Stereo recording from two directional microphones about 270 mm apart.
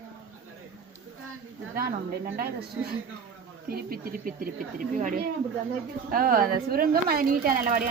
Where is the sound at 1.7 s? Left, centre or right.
Right.